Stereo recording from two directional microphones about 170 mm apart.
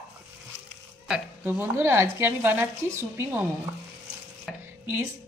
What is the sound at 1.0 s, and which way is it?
Speech, 5° right (ahead or behind).